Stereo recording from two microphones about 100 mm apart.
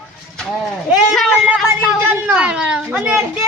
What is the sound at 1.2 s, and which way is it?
A woman's voice, centre (ahead or behind).